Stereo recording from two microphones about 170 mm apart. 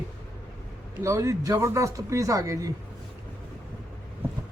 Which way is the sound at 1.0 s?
15° right (ahead or behind).